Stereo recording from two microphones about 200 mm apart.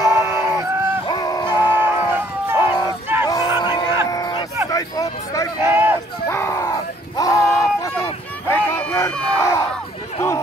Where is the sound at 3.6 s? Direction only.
20° left (ahead or behind).